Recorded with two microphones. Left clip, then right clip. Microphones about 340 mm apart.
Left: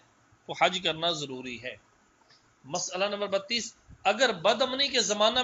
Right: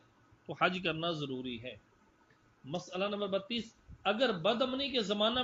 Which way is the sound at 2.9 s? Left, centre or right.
Left.